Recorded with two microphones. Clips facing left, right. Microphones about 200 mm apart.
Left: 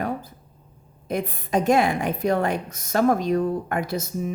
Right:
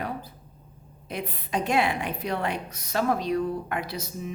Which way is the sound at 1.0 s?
45° left (ahead or behind).